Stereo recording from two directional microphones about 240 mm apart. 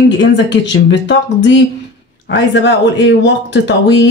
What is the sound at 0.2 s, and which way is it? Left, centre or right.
Speech, left.